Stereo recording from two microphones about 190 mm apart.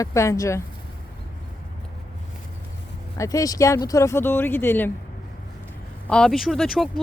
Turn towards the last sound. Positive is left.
turn(degrees=0)  # may be behind; listen again after turning